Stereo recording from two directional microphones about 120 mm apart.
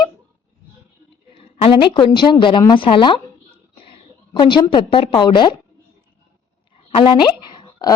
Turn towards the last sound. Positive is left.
turn(degrees=40)  # may be behind; listen again after turning